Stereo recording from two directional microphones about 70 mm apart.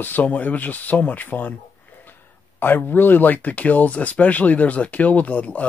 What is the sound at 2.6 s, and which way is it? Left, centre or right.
Speech, left.